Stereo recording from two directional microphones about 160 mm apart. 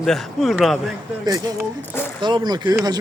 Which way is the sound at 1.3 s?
20° right (ahead or behind).